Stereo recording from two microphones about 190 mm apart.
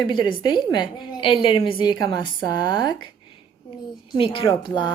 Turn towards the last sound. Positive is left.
turn(degrees=25)  # may be behind; listen again after turning